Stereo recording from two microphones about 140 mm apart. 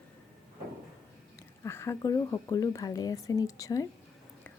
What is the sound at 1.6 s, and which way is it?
A woman's voice, 20° left (ahead or behind).